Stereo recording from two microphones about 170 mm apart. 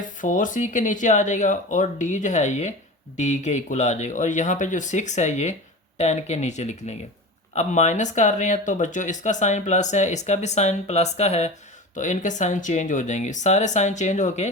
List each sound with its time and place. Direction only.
0.2 s speech: 50° left (ahead or behind)